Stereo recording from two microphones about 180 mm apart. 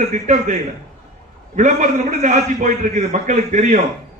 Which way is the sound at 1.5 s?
40° right (ahead or behind).